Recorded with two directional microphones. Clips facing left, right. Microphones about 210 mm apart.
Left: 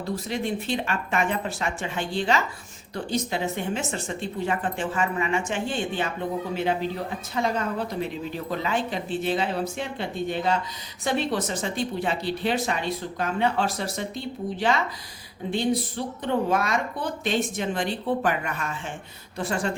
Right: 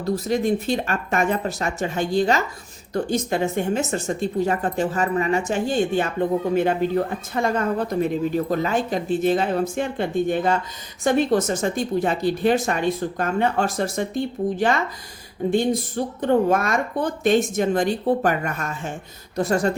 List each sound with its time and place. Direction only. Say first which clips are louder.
0.0 s speech: right 7 dB; 40° right (ahead or behind)